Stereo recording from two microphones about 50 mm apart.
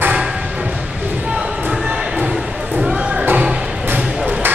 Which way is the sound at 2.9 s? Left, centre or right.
Right.